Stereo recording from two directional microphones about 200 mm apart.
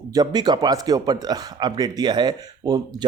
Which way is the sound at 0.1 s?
20° right (ahead or behind).